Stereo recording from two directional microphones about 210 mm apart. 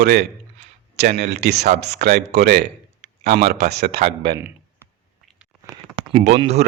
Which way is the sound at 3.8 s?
30° right (ahead or behind).